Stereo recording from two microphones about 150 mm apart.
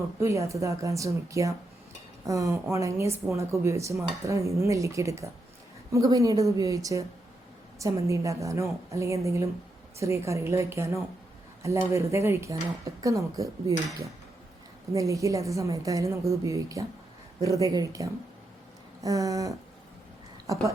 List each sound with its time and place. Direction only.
0.2 s speech: 20° right (ahead or behind)